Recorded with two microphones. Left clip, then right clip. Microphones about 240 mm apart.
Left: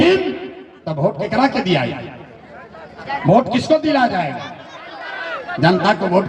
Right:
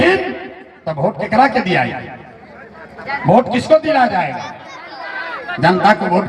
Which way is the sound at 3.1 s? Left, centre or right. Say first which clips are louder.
Right 2 dB; right.